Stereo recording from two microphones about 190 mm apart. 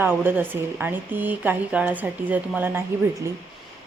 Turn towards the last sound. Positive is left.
turn(degrees=-15)  # may be behind; listen again after turning